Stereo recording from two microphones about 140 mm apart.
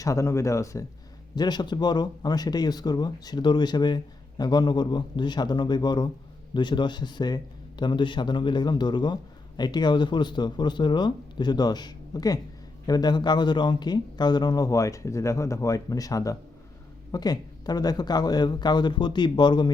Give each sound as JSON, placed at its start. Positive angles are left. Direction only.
{"t": 0.0, "sound": "a man's voice", "side_deg": 20}